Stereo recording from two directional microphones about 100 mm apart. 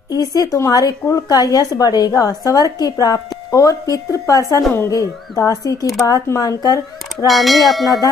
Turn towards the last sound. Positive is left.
turn(degrees=0)  # may be behind; listen again after turning